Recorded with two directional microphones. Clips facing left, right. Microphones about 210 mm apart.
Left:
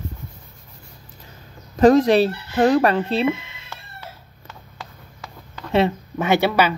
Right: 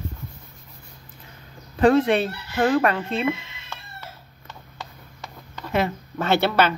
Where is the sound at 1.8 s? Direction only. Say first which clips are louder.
Left 4 dB; 40° left (ahead or behind).